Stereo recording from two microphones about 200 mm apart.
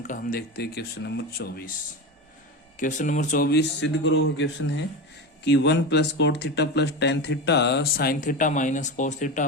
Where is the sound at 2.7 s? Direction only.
40° left (ahead or behind).